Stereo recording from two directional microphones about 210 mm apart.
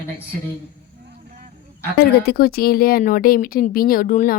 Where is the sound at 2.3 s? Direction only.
45° left (ahead or behind).